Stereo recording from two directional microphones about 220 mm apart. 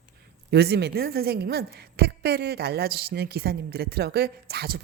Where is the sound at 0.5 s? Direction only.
50° right (ahead or behind).